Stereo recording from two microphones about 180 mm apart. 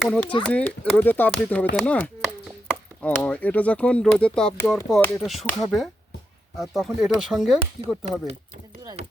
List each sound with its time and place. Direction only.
0.0 s speech: 5° left (ahead or behind)
5.2 s speech: centre (ahead or behind)
9.0 s chopping: 40° right (ahead or behind)